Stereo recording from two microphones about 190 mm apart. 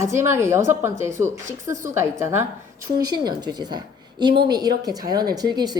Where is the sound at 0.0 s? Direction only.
15° right (ahead or behind).